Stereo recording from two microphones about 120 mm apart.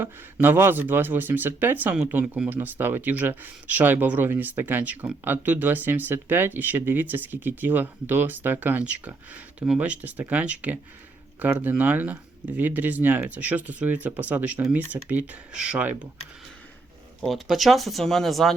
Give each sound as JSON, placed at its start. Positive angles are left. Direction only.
{"t": 0.0, "sound": "speech", "side_deg": -20}
{"t": 17.2, "sound": "speech", "side_deg": 0}